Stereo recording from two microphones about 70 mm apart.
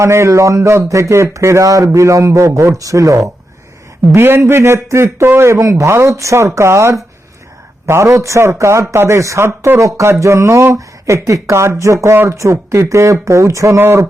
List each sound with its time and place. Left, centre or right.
0.0 s speech: right
4.1 s a man's voice: right
13.7 s a man's voice: right